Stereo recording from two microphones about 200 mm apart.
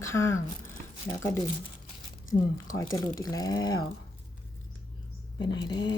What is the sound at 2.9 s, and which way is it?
Speech, 20° left (ahead or behind).